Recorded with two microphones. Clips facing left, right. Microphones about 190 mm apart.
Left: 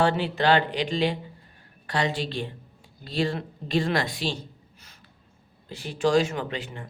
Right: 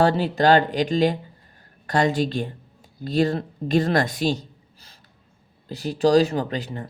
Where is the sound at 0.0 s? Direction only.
40° right (ahead or behind).